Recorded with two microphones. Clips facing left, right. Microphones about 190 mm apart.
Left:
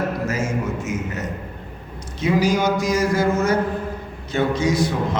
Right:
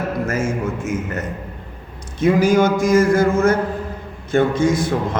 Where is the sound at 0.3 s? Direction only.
50° right (ahead or behind).